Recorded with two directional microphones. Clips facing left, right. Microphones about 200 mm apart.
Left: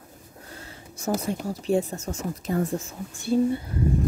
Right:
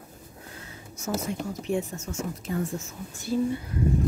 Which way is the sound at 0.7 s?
35° left (ahead or behind).